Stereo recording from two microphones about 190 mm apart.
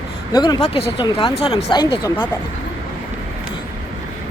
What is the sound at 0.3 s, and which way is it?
Speech, 20° left (ahead or behind).